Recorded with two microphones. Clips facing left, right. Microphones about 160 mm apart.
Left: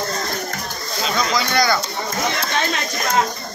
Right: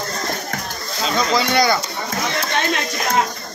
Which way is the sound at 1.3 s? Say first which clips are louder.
Right 3 dB; 25° right (ahead or behind).